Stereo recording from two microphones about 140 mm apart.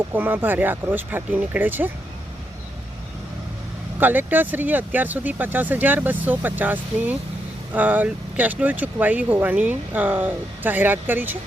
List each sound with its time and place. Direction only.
0.1 s speech: 10° right (ahead or behind)
4.0 s speech: 15° right (ahead or behind)